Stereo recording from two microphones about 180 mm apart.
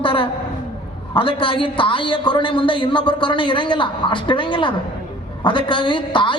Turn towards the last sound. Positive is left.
turn(degrees=25)  # may be behind; listen again after turning